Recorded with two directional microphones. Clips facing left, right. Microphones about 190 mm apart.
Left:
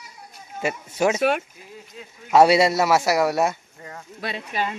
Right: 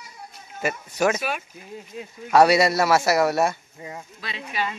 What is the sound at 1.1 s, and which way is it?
Speech, 65° left (ahead or behind).